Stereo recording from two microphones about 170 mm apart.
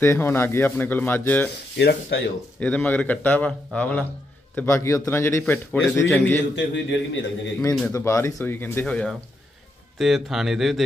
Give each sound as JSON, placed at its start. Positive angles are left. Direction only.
{"t": 0.0, "sound": "a man's voice", "side_deg": 15}
{"t": 1.8, "sound": "speech", "side_deg": 80}
{"t": 2.6, "sound": "a man's voice", "side_deg": 10}
{"t": 6.5, "sound": "a man's voice", "side_deg": 90}
{"t": 7.9, "sound": "a man's voice", "side_deg": 15}